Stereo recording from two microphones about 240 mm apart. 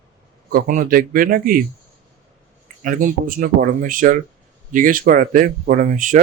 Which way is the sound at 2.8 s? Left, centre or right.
Right.